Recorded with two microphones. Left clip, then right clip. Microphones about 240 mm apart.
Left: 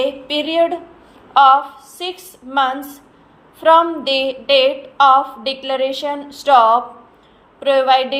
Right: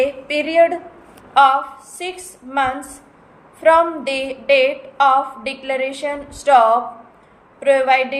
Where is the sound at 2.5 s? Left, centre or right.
Centre.